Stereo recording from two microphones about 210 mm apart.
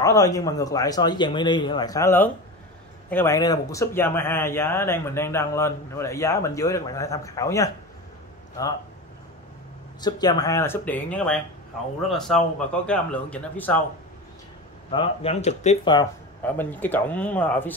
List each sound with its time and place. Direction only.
0.0 s speech: 15° left (ahead or behind)
9.9 s a man's voice: 20° left (ahead or behind)
14.9 s speech: 25° left (ahead or behind)
16.4 s speech: 10° left (ahead or behind)